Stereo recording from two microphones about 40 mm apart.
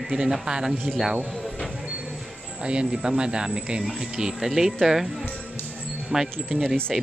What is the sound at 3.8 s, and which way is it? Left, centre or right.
Speech, centre.